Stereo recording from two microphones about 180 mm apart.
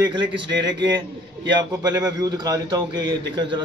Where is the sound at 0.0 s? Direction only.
25° right (ahead or behind).